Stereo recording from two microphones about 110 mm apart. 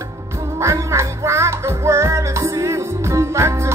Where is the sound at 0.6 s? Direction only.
25° right (ahead or behind).